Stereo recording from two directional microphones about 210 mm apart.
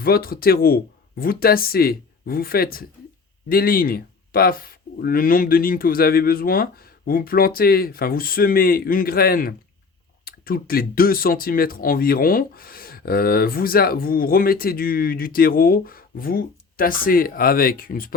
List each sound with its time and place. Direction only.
0.0 s speech: 45° left (ahead or behind)